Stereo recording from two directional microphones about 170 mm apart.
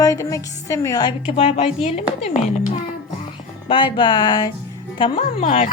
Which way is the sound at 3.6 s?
30° left (ahead or behind).